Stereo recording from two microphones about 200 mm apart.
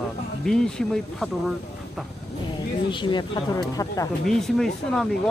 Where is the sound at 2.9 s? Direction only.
25° left (ahead or behind).